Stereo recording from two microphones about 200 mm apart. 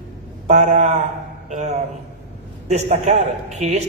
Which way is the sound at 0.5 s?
35° right (ahead or behind).